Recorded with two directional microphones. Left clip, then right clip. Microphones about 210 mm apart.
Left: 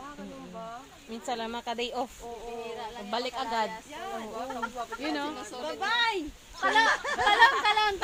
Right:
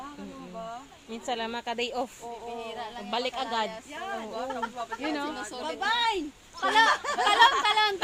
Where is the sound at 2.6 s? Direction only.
50° right (ahead or behind).